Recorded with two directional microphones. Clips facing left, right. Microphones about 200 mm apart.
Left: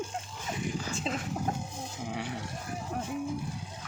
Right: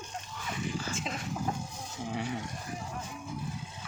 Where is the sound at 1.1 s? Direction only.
30° left (ahead or behind).